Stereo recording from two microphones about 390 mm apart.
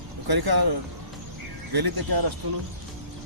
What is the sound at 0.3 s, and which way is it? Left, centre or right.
Speech, right.